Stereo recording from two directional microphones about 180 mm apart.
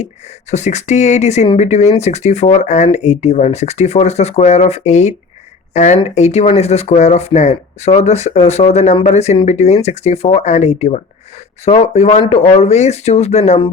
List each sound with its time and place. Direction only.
0.5 s speech: 40° left (ahead or behind)